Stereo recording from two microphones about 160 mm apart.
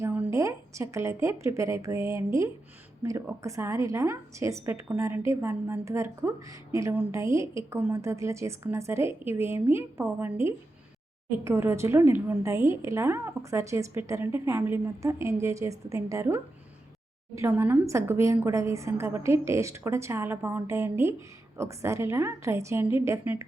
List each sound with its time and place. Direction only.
0.0 s a woman's voice: 15° right (ahead or behind)